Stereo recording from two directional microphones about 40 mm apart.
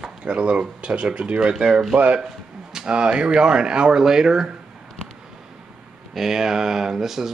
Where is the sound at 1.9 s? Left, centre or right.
Right.